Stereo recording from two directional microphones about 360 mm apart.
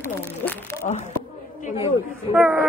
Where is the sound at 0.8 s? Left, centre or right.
Centre.